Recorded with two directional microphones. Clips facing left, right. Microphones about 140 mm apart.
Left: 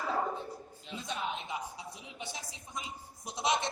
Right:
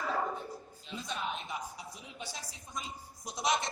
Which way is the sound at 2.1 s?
20° left (ahead or behind).